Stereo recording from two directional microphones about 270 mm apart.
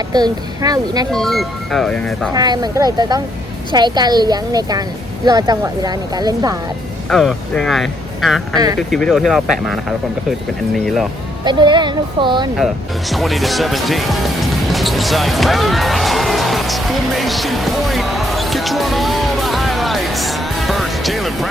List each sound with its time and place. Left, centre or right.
0.1 s a woman's voice: centre
1.1 s speech: centre
2.3 s a woman's voice: centre
7.1 s speech: centre
11.4 s a woman's voice: centre
12.5 s music: centre